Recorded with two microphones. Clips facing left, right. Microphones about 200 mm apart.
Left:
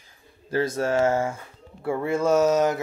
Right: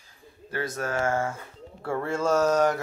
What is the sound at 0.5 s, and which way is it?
Speech, 25° left (ahead or behind).